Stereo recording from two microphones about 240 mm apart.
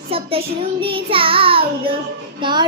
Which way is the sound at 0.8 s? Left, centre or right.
Right.